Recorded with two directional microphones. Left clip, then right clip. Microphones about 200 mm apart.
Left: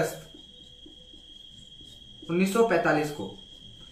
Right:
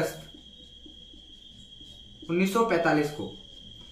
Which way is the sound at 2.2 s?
20° right (ahead or behind).